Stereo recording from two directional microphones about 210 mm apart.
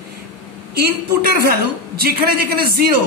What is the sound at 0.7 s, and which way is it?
A woman's voice, 50° right (ahead or behind).